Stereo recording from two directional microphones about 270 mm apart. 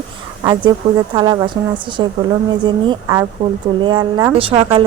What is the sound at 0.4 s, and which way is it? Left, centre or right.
Speech, centre.